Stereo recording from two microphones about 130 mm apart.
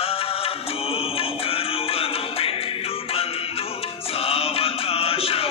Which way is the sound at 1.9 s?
45° left (ahead or behind).